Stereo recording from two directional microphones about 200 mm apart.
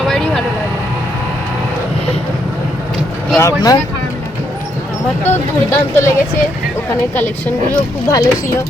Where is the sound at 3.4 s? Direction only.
15° left (ahead or behind).